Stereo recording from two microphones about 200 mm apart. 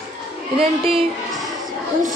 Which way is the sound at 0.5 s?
25° right (ahead or behind).